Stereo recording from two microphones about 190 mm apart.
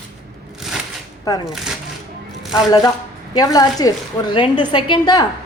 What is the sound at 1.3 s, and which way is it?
Speech, 20° left (ahead or behind).